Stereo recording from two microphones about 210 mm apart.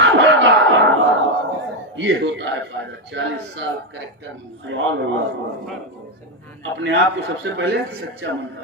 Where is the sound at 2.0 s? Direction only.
60° right (ahead or behind).